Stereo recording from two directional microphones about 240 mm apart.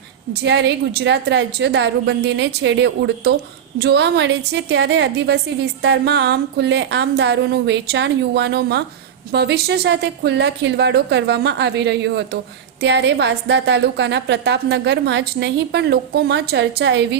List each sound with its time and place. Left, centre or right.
0.4 s a woman's voice: right